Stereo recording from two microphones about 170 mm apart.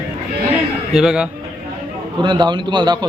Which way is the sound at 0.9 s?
5° right (ahead or behind).